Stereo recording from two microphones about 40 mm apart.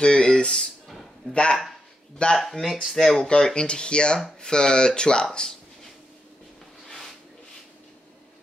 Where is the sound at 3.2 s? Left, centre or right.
Centre.